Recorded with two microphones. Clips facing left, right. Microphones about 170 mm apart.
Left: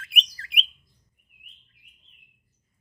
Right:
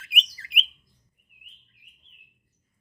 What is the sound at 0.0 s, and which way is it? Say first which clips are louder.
Bird: left 1 dB; 5° right (ahead or behind).